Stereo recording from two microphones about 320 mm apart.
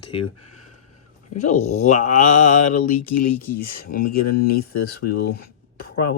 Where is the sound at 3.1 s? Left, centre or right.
Left.